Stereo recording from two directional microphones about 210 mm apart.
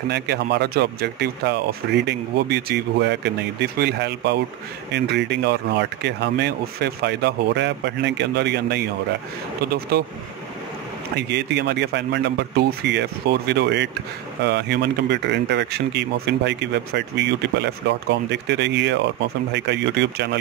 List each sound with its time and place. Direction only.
0.1 s speech: 50° right (ahead or behind)
9.9 s speech: 50° right (ahead or behind)
11.1 s speech: 55° right (ahead or behind)